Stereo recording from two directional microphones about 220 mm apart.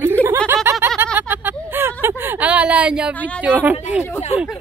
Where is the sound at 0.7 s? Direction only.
10° right (ahead or behind).